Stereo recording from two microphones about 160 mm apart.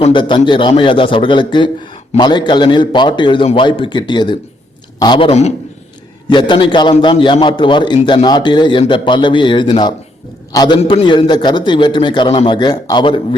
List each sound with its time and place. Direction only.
0.0 s a man's voice: 30° left (ahead or behind)
6.2 s a man's voice: 30° left (ahead or behind)
10.8 s a man's voice: 40° left (ahead or behind)
11.0 s a man's voice: 30° left (ahead or behind)